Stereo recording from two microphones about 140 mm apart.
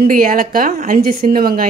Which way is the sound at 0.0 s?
90° right.